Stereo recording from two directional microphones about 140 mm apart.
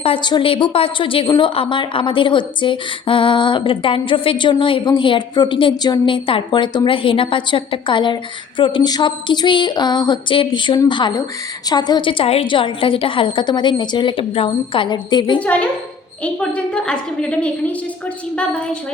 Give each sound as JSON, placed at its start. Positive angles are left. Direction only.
{"t": 0.0, "sound": "a woman's voice", "side_deg": 35}
{"t": 15.4, "sound": "a woman's voice", "side_deg": 10}